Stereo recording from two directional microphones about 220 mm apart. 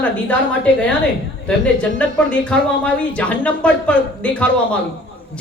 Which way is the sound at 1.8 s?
5° left (ahead or behind).